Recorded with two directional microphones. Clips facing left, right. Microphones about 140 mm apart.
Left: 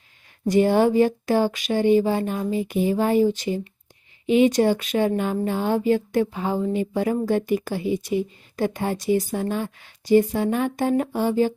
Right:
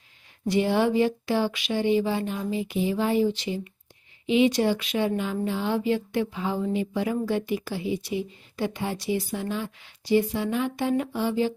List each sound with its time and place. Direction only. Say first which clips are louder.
0.4 s speech: left 5 dB; 45° left (ahead or behind)